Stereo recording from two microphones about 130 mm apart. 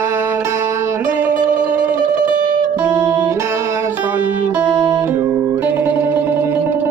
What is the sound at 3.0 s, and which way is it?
Music, 25° right (ahead or behind).